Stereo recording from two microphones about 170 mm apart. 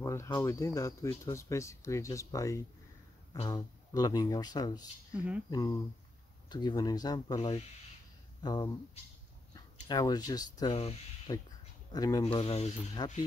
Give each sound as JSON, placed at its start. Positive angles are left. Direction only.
{"t": 0.0, "sound": "speech", "side_deg": 20}
{"t": 5.1, "sound": "speech", "side_deg": -5}
{"t": 5.5, "sound": "speech", "side_deg": 20}
{"t": 9.8, "sound": "speech", "side_deg": 25}
{"t": 10.8, "sound": "speech", "side_deg": 35}
{"t": 11.9, "sound": "speech", "side_deg": 20}
{"t": 12.3, "sound": "speech", "side_deg": 35}
{"t": 13.0, "sound": "speech", "side_deg": 20}